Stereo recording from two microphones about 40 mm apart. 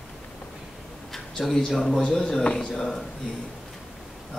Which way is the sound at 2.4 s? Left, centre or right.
Left.